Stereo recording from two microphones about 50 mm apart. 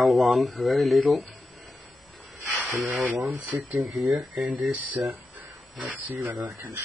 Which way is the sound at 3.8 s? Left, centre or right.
Centre.